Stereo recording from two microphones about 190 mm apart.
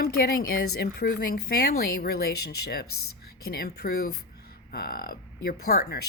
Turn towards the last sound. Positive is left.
turn(degrees=55)  # may be behind; listen again after turning